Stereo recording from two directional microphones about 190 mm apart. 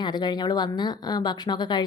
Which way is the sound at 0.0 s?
20° left (ahead or behind).